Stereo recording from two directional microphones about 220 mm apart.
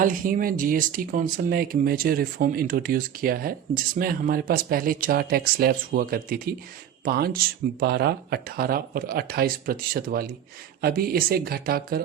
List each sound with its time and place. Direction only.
0.0 s speech: 40° right (ahead or behind)